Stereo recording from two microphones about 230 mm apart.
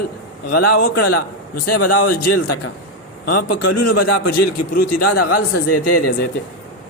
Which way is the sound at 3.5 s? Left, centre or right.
Left.